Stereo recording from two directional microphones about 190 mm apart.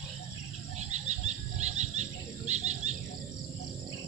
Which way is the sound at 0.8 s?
35° right (ahead or behind).